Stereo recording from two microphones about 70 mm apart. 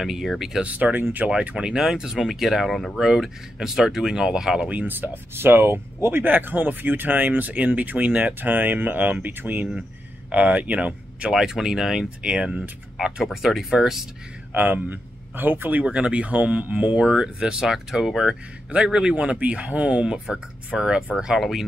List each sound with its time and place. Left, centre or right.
0.0 s speech: centre
0.7 s speech: right
1.3 s speech: centre
4.6 s speech: right; by 14.0 s centre
14.5 s speech: right
15.8 s speech: centre